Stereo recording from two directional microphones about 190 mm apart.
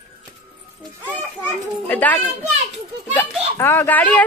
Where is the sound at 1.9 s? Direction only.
10° left (ahead or behind).